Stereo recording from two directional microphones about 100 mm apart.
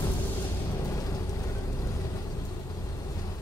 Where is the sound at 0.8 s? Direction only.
35° left (ahead or behind).